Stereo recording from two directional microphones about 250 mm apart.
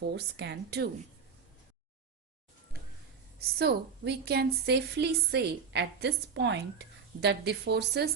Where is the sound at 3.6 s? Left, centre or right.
Right.